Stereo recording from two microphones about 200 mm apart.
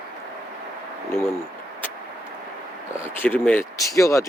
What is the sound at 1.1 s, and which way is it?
Speech, 15° left (ahead or behind).